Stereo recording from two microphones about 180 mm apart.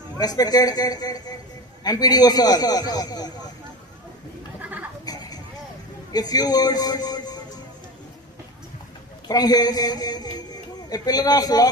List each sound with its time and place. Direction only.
0.2 s speech: 20° left (ahead or behind)
5.0 s a sound: 20° left (ahead or behind)
6.1 s speech: 20° left (ahead or behind)
9.2 s speech: 20° left (ahead or behind)